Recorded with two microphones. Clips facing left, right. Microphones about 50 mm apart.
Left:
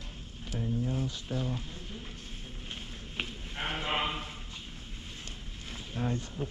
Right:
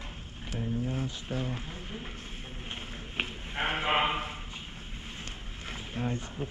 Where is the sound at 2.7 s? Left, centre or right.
Right.